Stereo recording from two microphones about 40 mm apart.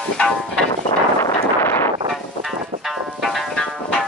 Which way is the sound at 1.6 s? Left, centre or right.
Left.